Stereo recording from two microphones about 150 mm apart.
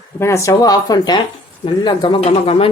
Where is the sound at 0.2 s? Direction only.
20° left (ahead or behind).